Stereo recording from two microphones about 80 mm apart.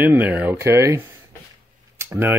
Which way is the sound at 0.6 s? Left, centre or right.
Right.